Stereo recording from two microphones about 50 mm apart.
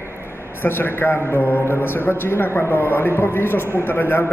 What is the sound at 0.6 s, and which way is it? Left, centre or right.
A man's voice, left.